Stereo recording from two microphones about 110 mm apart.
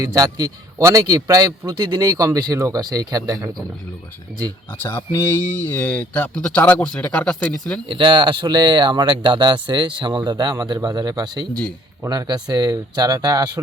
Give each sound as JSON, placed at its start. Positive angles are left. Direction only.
{"t": 0.0, "sound": "speech", "side_deg": -35}
{"t": 4.8, "sound": "speech", "side_deg": 20}
{"t": 7.9, "sound": "speech", "side_deg": -50}